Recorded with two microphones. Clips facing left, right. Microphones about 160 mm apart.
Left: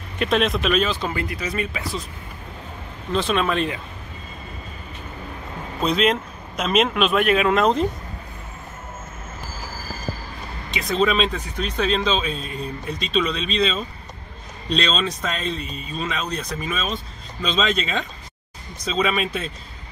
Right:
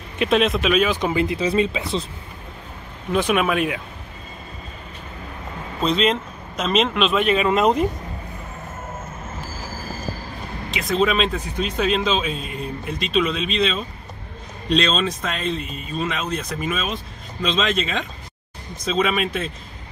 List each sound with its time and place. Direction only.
0.2 s speech: centre (ahead or behind)
0.8 s speech: 20° right (ahead or behind)
3.1 s speech: 10° right (ahead or behind)
5.8 s speech: 5° left (ahead or behind)
10.7 s speech: centre (ahead or behind)